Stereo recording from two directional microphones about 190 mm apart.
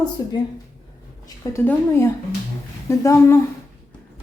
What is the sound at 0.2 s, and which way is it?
Speech, 20° left (ahead or behind).